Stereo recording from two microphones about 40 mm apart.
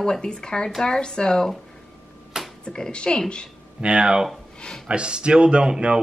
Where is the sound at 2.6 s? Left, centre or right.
Left.